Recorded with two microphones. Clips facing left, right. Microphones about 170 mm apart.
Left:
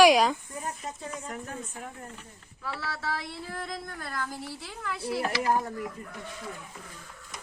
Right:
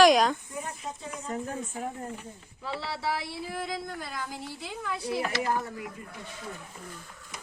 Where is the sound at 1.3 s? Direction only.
30° right (ahead or behind).